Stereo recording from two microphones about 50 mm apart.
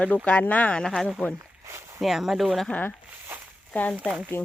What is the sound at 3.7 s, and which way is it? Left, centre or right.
Speech, left.